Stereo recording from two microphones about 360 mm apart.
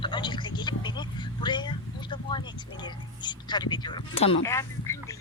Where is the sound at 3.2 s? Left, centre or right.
Centre.